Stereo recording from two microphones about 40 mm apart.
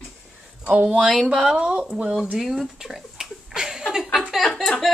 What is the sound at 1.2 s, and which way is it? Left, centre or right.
Speech, centre.